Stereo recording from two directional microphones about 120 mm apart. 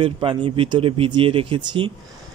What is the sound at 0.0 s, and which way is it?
Speech, 45° right (ahead or behind).